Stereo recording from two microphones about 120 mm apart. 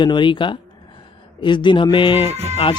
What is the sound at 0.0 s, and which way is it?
Speech, 40° left (ahead or behind).